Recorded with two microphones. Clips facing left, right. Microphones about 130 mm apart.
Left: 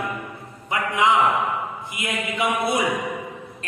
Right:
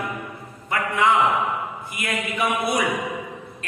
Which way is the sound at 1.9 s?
20° left (ahead or behind).